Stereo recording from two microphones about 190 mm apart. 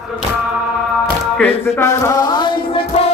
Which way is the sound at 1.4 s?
15° left (ahead or behind).